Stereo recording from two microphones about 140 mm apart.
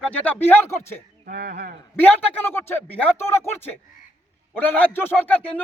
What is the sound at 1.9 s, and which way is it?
Speech, 10° left (ahead or behind).